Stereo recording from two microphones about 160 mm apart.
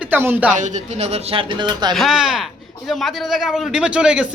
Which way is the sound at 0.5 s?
50° right (ahead or behind).